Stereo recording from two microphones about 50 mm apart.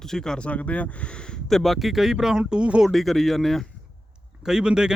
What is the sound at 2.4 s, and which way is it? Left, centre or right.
Speech, right.